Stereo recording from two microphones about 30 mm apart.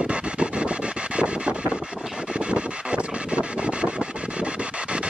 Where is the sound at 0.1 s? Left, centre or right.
Right.